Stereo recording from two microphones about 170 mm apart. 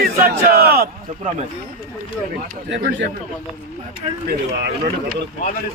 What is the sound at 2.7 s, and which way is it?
Speech, 90° right.